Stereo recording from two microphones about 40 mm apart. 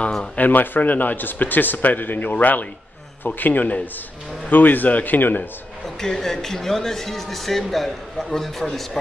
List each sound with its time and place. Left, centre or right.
0.4 s speech: left
5.9 s speech: centre